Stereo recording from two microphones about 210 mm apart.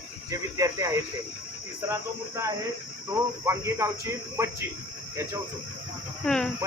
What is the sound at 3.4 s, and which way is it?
Speech, 15° right (ahead or behind).